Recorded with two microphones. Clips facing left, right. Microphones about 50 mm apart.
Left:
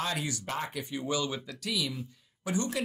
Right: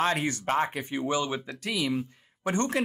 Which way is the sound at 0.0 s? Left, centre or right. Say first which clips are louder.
Right 7 dB; right.